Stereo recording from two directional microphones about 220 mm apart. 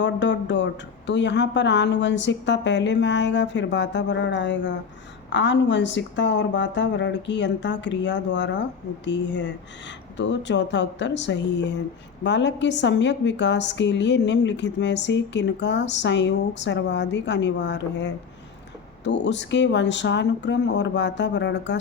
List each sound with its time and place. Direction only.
0.0 s a woman's voice: 55° left (ahead or behind)